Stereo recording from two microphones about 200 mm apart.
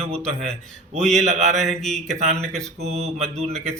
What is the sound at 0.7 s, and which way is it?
Speech, centre (ahead or behind).